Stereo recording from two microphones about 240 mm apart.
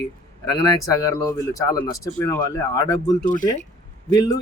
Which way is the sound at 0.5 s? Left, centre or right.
Centre.